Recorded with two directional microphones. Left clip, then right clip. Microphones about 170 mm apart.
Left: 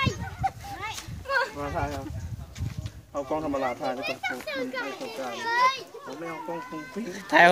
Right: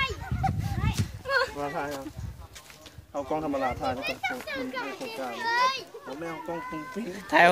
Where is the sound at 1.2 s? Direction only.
65° right (ahead or behind).